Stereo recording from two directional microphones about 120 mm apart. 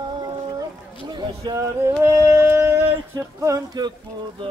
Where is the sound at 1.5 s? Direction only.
25° right (ahead or behind).